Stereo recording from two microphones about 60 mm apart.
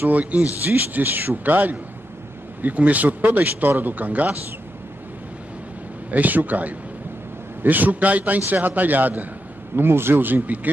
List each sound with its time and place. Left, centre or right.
0.0 s speech: right
6.1 s speech: right
9.8 s speech: right